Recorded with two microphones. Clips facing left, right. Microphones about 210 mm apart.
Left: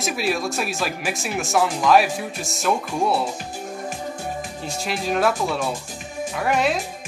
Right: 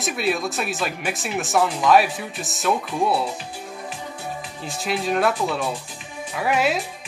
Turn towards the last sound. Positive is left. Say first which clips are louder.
# even
turn(degrees=-5)  # may be behind; listen again after turning